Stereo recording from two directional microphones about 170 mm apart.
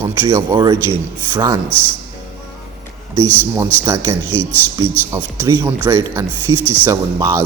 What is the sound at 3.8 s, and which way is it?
A man's voice, 15° right (ahead or behind).